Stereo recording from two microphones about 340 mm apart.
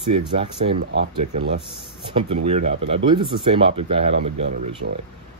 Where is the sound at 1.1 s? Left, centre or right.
Centre.